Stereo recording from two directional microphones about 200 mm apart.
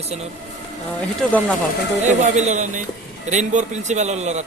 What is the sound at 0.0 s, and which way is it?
Speech, 30° right (ahead or behind).